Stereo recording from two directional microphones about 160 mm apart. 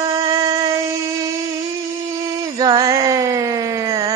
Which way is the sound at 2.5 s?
25° right (ahead or behind).